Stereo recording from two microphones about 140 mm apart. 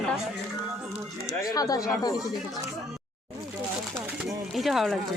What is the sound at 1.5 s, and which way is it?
Speech, 25° left (ahead or behind).